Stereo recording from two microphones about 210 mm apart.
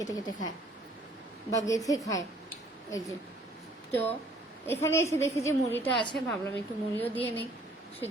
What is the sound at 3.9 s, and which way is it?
A woman's voice, 10° left (ahead or behind).